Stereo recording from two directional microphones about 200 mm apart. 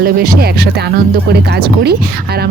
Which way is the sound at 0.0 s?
50° right (ahead or behind).